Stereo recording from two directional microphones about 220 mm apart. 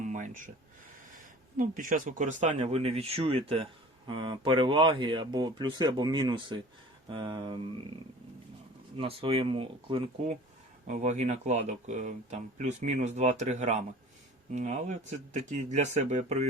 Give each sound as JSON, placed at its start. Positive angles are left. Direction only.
{"t": 0.0, "sound": "a sound", "side_deg": -35}
{"t": 1.5, "sound": "speech", "side_deg": -40}
{"t": 9.0, "sound": "speech", "side_deg": -25}